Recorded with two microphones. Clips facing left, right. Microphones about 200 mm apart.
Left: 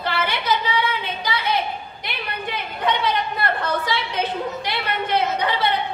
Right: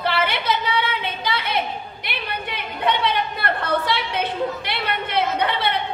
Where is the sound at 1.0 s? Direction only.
60° right (ahead or behind).